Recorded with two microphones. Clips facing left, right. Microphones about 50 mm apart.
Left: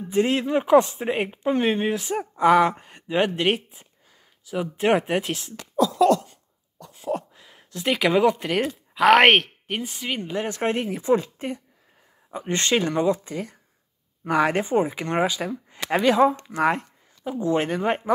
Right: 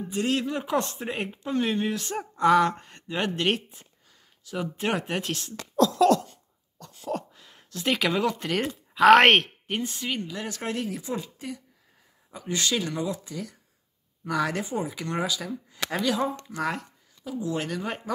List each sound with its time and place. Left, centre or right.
0.1 s speech: left
2.0 s speech: centre
10.2 s speech: left
11.1 s speech: left